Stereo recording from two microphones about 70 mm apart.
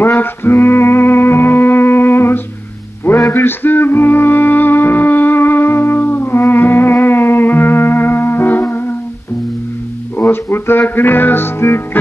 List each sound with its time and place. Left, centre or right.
0.0 s music: left
10.1 s music: left